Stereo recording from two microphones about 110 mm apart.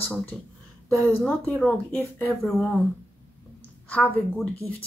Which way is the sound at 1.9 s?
15° left (ahead or behind).